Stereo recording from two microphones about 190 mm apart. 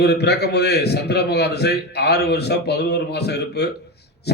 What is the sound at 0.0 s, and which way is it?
A man's voice, 60° left (ahead or behind).